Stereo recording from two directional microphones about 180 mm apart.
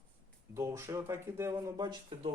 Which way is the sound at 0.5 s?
15° right (ahead or behind).